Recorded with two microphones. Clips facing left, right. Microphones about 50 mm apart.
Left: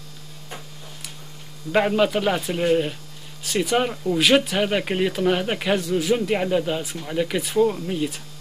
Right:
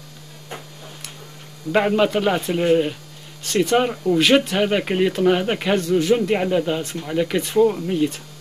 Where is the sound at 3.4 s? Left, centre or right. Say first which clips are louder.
Right 3 dB; centre.